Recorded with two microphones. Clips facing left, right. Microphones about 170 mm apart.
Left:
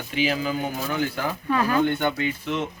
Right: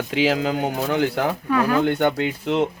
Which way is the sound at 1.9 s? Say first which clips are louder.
Right 4 dB; 60° right (ahead or behind).